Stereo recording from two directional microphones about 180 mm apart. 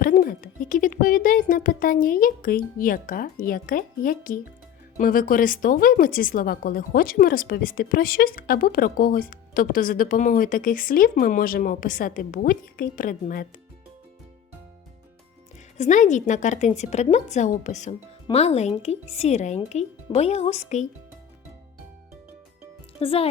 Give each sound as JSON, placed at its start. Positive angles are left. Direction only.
{"t": 0.0, "sound": "a woman's voice", "side_deg": 55}
{"t": 15.8, "sound": "a woman's voice", "side_deg": 45}
{"t": 23.0, "sound": "a woman's voice", "side_deg": 30}